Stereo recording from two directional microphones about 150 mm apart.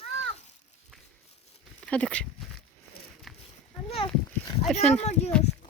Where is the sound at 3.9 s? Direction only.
35° left (ahead or behind).